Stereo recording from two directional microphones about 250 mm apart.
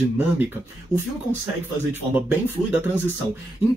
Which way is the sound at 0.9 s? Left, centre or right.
Left.